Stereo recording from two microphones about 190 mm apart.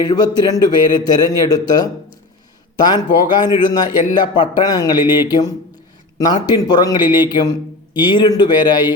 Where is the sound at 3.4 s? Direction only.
20° left (ahead or behind).